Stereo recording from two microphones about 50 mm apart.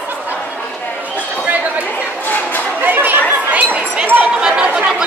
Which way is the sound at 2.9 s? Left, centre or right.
Right.